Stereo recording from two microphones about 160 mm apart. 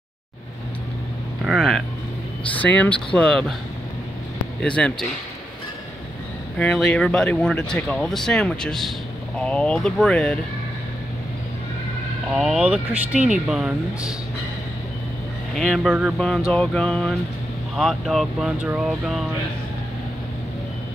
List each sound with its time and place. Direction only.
1.4 s speech: centre (ahead or behind)
4.6 s speech: 5° left (ahead or behind)
6.6 s speech: 5° left (ahead or behind)
12.3 s speech: 5° right (ahead or behind)
15.5 s speech: centre (ahead or behind)